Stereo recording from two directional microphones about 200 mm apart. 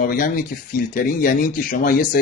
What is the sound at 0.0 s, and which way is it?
Speech, 45° left (ahead or behind).